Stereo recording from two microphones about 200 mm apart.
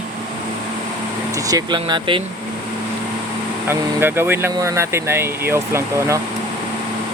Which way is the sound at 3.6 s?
10° right (ahead or behind).